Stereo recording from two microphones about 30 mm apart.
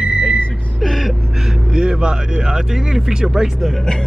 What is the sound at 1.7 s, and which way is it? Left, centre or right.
Speech, right.